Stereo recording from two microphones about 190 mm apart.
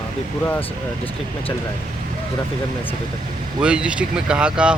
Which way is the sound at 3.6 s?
5° right (ahead or behind).